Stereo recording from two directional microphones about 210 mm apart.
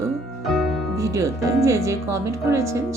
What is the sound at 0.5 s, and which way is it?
Music, centre (ahead or behind).